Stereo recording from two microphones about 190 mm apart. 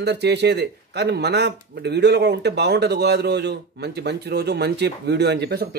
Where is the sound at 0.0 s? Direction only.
60° right (ahead or behind).